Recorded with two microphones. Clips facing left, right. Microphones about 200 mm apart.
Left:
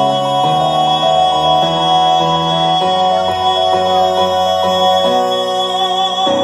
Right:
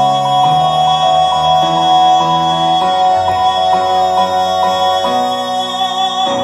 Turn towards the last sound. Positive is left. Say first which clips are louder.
# left 2 dB
turn(degrees=30)  # may be behind; listen again after turning